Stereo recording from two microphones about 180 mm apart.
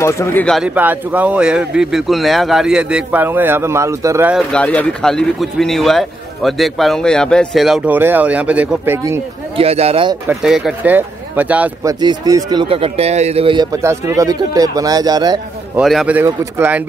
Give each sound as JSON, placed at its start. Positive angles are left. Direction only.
{"t": 0.0, "sound": "speech", "side_deg": 15}
{"t": 0.6, "sound": "speech", "side_deg": -10}
{"t": 4.3, "sound": "speech", "side_deg": 0}
{"t": 9.6, "sound": "speech", "side_deg": -35}
{"t": 10.2, "sound": "speech", "side_deg": -5}
{"t": 11.9, "sound": "a man's voice", "side_deg": -20}
{"t": 15.7, "sound": "speech", "side_deg": 0}